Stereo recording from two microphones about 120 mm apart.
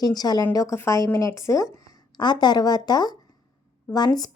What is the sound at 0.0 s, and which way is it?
A woman's voice, 35° left (ahead or behind).